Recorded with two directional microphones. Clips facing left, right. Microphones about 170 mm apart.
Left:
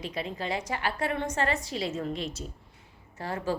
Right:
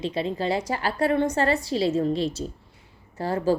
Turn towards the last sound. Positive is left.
turn(degrees=-35)  # may be behind; listen again after turning